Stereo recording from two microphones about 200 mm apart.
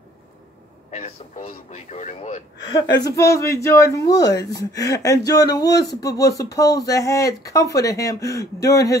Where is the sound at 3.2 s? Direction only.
15° left (ahead or behind).